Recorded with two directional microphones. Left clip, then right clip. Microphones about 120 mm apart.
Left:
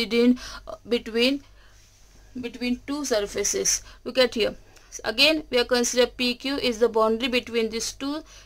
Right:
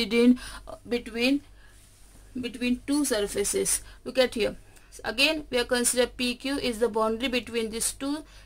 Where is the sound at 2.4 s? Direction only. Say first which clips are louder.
Even; 20° left (ahead or behind).